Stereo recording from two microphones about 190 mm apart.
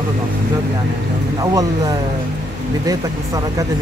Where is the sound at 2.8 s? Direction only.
20° right (ahead or behind).